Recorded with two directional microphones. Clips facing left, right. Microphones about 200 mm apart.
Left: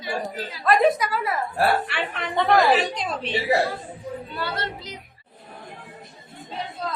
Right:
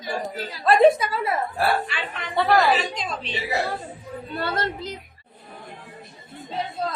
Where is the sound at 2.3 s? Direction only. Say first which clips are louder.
Even; 5° right (ahead or behind).